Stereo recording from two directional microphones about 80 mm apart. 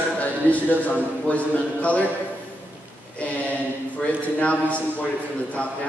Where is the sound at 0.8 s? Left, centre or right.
Centre.